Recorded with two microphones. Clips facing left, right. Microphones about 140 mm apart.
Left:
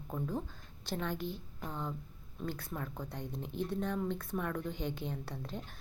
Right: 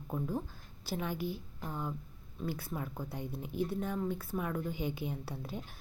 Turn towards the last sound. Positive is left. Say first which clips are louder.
# right 1 dB
turn(degrees=-10)  # may be behind; listen again after turning